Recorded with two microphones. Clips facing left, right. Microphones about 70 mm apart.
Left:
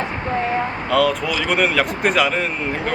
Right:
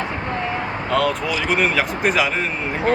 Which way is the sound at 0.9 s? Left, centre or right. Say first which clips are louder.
Left 1 dB; centre.